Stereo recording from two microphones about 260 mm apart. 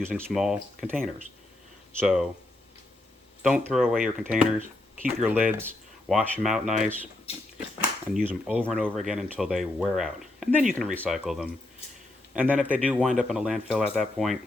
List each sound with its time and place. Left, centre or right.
0.0 s speech: centre
3.4 s speech: centre
8.1 s speech: centre